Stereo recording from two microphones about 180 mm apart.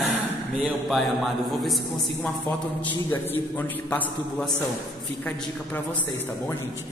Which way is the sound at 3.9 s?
5° left (ahead or behind).